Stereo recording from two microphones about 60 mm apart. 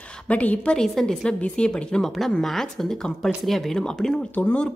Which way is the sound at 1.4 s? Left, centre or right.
Centre.